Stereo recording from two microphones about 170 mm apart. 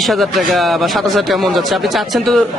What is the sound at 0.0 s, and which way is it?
Speech, centre (ahead or behind).